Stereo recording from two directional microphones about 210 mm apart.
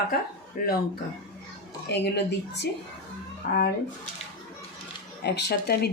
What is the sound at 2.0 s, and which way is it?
Speech, 55° left (ahead or behind).